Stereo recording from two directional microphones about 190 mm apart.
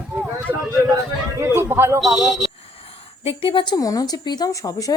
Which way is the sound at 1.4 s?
15° right (ahead or behind).